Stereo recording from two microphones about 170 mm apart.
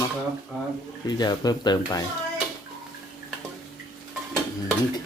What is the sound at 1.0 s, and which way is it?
Speech, 25° left (ahead or behind).